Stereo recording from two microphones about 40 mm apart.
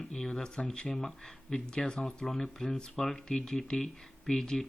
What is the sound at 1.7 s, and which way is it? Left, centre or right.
Speech, left.